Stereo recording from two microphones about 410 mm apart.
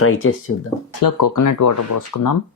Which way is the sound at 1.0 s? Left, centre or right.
Left.